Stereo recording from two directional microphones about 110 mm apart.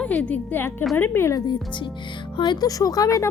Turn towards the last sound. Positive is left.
turn(degrees=30)  # may be behind; listen again after turning